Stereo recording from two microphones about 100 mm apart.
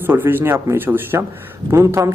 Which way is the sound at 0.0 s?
20° right (ahead or behind).